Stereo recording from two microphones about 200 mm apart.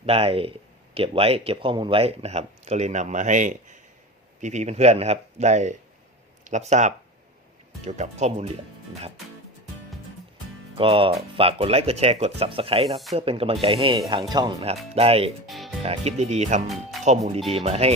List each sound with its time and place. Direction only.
0.0 s speech: 30° right (ahead or behind)
10.8 s speech: 25° right (ahead or behind)
15.4 s speech: centre (ahead or behind)
15.8 s speech: 30° right (ahead or behind)